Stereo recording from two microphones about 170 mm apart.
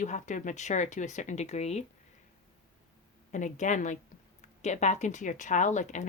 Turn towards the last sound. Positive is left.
turn(degrees=45)  # may be behind; listen again after turning